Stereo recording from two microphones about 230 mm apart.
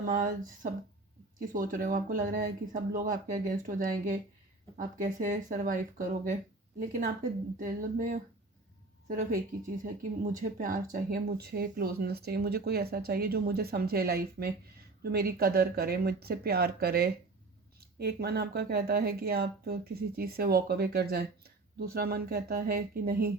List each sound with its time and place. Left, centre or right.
0.0 s speech: right
10.3 s speech: right